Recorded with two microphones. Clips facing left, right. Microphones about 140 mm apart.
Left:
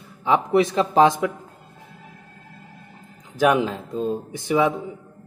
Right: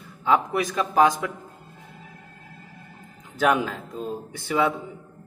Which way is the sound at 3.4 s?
20° left (ahead or behind).